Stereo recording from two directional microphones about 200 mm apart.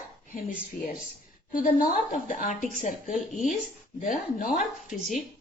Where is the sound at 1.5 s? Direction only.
45° left (ahead or behind).